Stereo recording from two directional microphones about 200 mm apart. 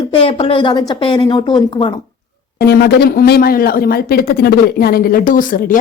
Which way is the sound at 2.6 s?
55° left (ahead or behind).